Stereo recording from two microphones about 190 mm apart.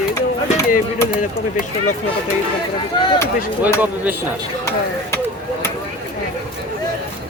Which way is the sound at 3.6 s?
10° right (ahead or behind).